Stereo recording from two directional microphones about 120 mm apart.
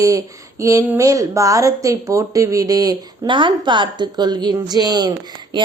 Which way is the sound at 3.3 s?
45° right (ahead or behind).